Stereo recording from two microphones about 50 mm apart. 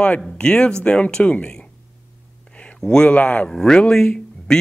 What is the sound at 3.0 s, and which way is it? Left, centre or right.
Speech, left.